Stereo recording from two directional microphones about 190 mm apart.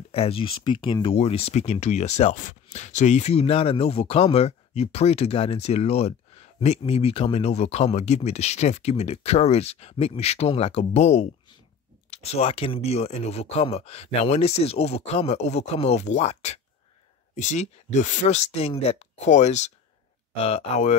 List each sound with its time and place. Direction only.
0.1 s speech: 30° left (ahead or behind)